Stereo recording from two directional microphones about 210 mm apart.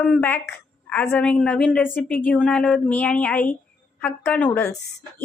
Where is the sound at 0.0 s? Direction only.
10° left (ahead or behind).